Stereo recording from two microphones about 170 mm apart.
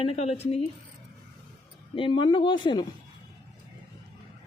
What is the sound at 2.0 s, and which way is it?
Speech, 30° left (ahead or behind).